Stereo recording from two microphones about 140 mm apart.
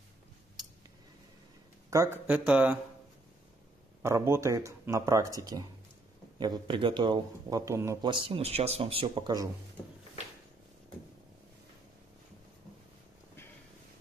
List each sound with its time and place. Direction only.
1.9 s a man's voice: 20° right (ahead or behind)
2.2 s speech: 10° right (ahead or behind)
4.0 s a man's voice: 20° right (ahead or behind)
8.0 s a man's voice: 35° right (ahead or behind)